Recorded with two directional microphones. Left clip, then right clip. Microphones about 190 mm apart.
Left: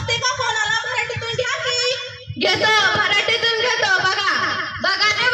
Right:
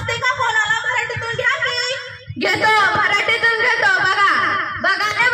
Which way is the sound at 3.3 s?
30° left (ahead or behind).